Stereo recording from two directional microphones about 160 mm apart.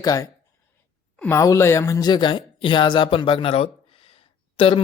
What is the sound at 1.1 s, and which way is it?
Speech, 10° left (ahead or behind).